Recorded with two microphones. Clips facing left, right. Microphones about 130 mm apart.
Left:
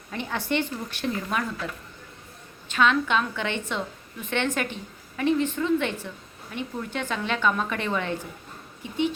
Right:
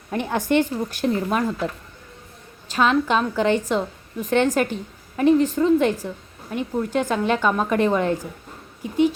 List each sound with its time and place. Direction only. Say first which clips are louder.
0.1 s speech: right 7 dB; 45° right (ahead or behind)
2.6 s a woman's voice: right 3 dB; 40° right (ahead or behind)